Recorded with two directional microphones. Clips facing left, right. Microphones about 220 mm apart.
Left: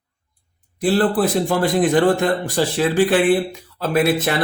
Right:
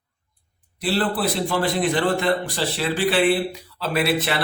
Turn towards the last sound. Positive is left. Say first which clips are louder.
# left 4 dB
turn(degrees=45)  # may be behind; listen again after turning